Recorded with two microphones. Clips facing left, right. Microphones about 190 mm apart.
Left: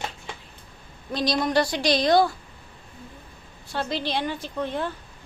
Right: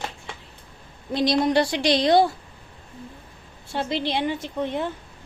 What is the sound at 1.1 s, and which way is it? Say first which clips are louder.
A woman's voice: right 3 dB; 25° right (ahead or behind).